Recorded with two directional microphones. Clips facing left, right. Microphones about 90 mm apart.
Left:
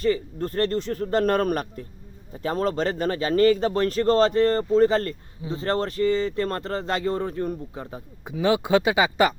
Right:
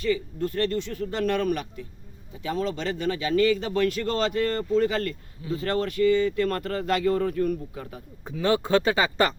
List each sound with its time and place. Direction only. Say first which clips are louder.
0.0 s a man's voice: left 2 dB; 40° left (ahead or behind)
8.2 s speech: left 2 dB; 10° left (ahead or behind)